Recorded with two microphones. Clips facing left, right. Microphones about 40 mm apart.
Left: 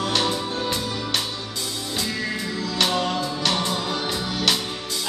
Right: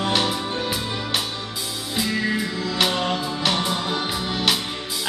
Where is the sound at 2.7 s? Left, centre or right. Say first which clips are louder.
Even; centre.